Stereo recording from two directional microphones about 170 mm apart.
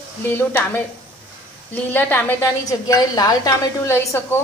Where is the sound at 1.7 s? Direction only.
10° left (ahead or behind).